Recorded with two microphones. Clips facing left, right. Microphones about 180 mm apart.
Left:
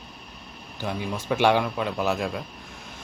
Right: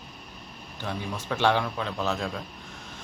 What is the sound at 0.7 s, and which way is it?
Speech, 10° left (ahead or behind).